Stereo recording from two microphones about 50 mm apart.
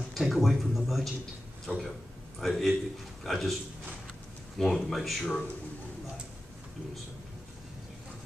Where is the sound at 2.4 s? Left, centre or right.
Centre.